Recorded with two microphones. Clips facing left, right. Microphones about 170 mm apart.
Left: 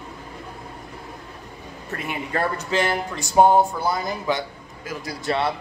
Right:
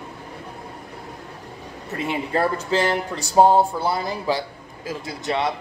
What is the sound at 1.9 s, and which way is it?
Speech, 25° right (ahead or behind).